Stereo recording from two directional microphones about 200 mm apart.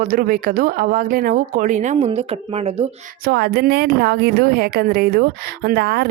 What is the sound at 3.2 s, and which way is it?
A woman's voice, 55° right (ahead or behind).